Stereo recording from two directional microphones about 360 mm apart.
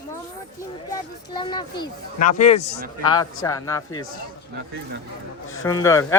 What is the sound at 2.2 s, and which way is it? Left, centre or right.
Speech, left.